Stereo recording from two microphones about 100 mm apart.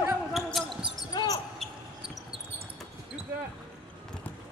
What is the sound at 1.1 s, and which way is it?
Basketball bounce, 35° left (ahead or behind).